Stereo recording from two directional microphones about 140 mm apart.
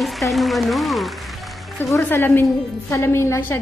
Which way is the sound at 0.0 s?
Centre (ahead or behind).